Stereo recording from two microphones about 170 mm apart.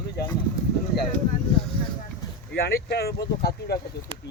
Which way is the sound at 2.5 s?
70° left (ahead or behind).